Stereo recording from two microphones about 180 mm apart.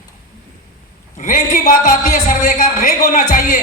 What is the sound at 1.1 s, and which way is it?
Speech, 45° left (ahead or behind).